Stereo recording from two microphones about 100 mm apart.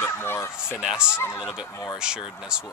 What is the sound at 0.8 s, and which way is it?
Speech, 10° right (ahead or behind).